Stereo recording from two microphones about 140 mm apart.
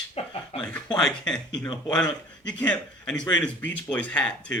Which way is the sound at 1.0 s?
5° left (ahead or behind).